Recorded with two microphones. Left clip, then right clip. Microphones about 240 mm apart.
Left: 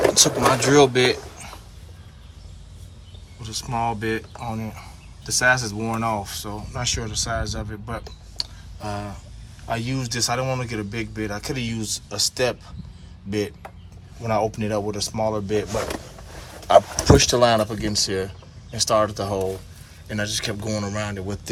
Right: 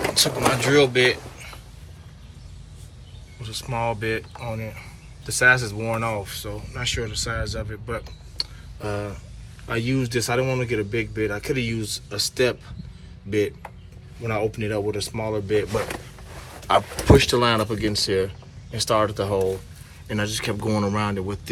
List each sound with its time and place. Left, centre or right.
0.1 s speech: centre
3.4 s speech: centre
14.3 s speech: centre